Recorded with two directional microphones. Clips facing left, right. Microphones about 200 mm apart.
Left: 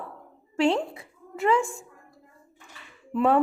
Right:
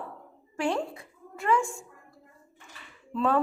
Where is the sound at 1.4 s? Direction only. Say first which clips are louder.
Left 3 dB; 25° left (ahead or behind).